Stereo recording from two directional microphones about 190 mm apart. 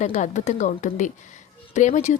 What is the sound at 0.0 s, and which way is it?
A woman's voice, 40° left (ahead or behind).